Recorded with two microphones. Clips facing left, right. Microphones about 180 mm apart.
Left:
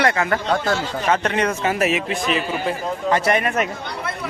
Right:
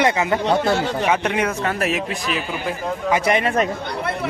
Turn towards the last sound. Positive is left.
turn(degrees=-25)  # may be behind; listen again after turning